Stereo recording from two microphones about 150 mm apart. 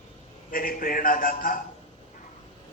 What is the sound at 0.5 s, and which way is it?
A man's voice, 70° left (ahead or behind).